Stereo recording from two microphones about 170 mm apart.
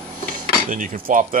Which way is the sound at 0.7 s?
50° right (ahead or behind).